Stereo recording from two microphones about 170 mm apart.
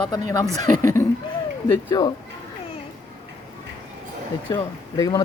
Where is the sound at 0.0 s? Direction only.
20° left (ahead or behind).